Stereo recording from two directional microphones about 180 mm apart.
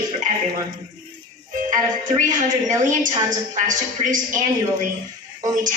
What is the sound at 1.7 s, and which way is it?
A woman's voice, 45° right (ahead or behind).